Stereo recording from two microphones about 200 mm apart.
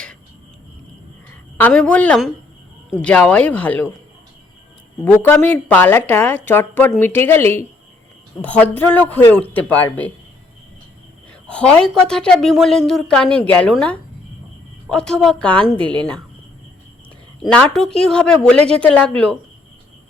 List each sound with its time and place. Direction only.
1.5 s a woman's voice: 10° left (ahead or behind)
5.0 s a woman's voice: 10° left (ahead or behind)
11.4 s a woman's voice: 5° left (ahead or behind)
17.4 s a woman's voice: 5° left (ahead or behind)